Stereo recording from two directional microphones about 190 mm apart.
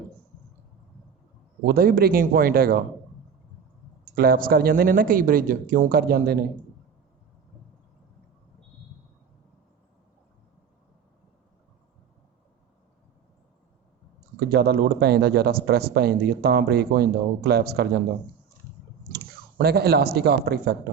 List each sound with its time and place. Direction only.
1.6 s speech: 50° right (ahead or behind)
4.1 s speech: 50° right (ahead or behind)
14.3 s speech: 60° right (ahead or behind)
19.1 s speech: 55° right (ahead or behind)